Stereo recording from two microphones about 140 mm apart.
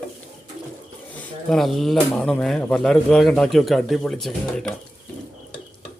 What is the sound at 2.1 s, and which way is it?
A man's voice, 5° left (ahead or behind).